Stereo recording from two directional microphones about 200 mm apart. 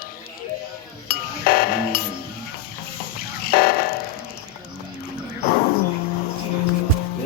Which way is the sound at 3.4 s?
50° left (ahead or behind).